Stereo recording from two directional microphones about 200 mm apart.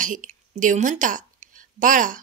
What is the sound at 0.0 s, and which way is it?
A woman's voice, 40° right (ahead or behind).